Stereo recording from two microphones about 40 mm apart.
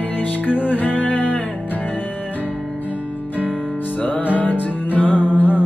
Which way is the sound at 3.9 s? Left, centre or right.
Left.